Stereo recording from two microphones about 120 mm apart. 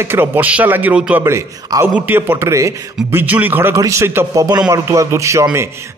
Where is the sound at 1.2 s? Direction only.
20° right (ahead or behind).